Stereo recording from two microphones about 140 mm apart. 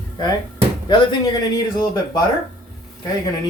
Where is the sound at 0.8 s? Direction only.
30° left (ahead or behind).